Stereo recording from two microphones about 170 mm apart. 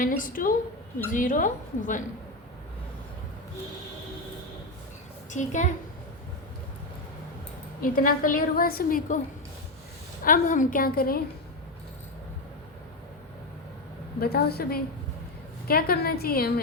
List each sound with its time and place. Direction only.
0.0 s a woman's voice: 55° left (ahead or behind)
5.3 s a woman's voice: 45° left (ahead or behind)
7.8 s a woman's voice: 55° left (ahead or behind)
10.2 s a woman's voice: 50° left (ahead or behind)
14.2 s a woman's voice: 65° left (ahead or behind)